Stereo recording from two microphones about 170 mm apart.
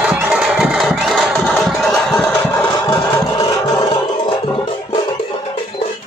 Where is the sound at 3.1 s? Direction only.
20° left (ahead or behind).